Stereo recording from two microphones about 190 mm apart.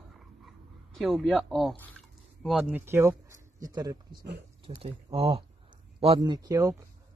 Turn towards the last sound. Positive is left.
turn(degrees=-15)  # may be behind; listen again after turning